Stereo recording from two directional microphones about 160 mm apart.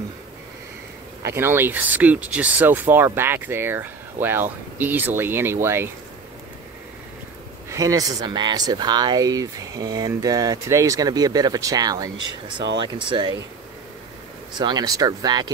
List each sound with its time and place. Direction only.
1.2 s speech: 15° right (ahead or behind)
7.7 s speech: 20° right (ahead or behind)
14.6 s speech: 25° right (ahead or behind)